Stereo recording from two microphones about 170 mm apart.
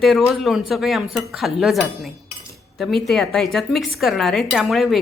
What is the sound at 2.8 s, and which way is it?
Speech, centre (ahead or behind).